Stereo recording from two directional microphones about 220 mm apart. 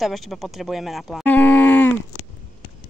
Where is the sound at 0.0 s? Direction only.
Centre (ahead or behind).